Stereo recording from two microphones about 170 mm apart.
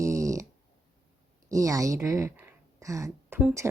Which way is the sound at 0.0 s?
20° right (ahead or behind).